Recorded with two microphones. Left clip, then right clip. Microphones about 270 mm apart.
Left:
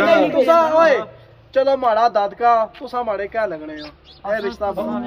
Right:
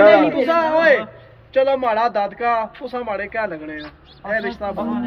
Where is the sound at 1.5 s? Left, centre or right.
Centre.